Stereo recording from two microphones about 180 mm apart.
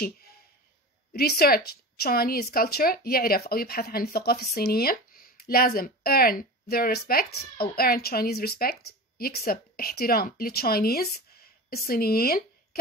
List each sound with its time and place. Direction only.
1.1 s a woman's voice: 60° left (ahead or behind)